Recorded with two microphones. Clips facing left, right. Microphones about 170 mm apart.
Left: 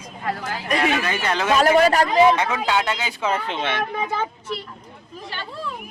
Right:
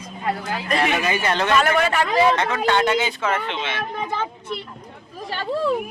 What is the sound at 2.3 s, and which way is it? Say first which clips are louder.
Speech: right 1 dB; 10° left (ahead or behind).